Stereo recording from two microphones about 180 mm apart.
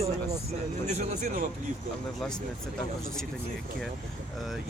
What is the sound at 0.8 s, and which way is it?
Speech, 40° right (ahead or behind).